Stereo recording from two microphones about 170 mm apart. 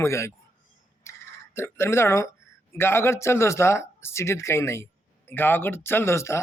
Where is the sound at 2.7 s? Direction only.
15° left (ahead or behind).